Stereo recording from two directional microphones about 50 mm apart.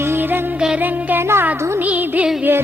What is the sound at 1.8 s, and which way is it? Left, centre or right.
Music, right.